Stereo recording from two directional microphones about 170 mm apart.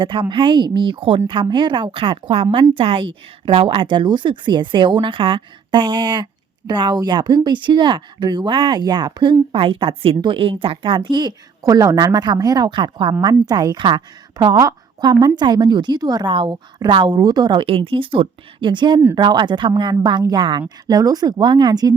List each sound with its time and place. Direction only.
0.0 s speech: 30° right (ahead or behind)